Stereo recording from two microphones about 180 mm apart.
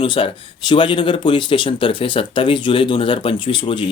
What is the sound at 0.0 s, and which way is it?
Speech, 30° left (ahead or behind).